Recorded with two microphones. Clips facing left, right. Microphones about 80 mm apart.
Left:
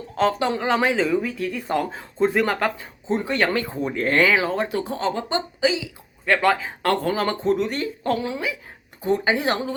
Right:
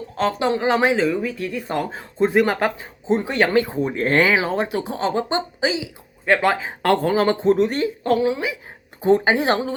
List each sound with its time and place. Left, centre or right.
0.2 s speech: centre; by 7.9 s right
8.2 s speech: centre
9.0 s speech: right